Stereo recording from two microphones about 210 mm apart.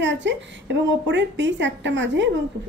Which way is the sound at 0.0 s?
60° right (ahead or behind).